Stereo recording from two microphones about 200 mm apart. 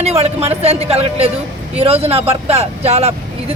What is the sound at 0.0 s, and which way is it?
A woman's voice, 30° right (ahead or behind).